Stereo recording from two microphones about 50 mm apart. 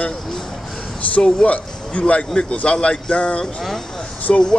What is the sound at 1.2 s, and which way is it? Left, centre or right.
A man's voice, left.